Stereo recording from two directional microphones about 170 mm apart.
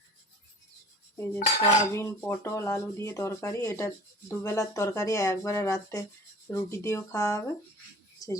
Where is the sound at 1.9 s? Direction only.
15° left (ahead or behind).